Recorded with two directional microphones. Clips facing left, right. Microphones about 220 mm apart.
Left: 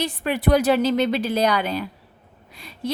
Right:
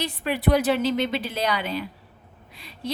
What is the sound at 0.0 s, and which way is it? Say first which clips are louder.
A woman's voice: left 2 dB; 50° left (ahead or behind).